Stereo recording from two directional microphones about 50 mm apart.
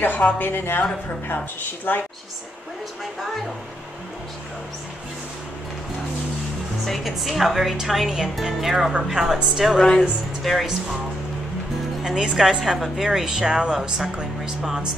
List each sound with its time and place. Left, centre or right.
0.4 s speech: left
1.9 s a woman's voice: left
6.9 s a woman's voice: centre
9.9 s a woman's voice: centre
12.0 s speech: centre